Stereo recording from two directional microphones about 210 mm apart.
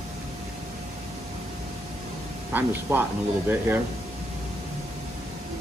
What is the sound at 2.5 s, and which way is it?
Speech, 10° right (ahead or behind).